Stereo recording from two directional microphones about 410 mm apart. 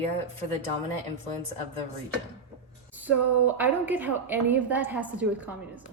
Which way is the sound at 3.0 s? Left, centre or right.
Centre.